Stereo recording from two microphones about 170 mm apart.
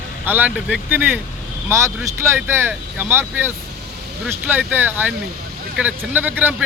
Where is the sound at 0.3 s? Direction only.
10° right (ahead or behind).